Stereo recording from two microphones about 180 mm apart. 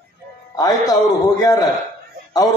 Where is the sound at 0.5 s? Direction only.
20° left (ahead or behind).